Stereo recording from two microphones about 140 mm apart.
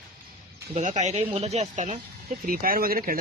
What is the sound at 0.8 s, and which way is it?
Speech, 60° right (ahead or behind).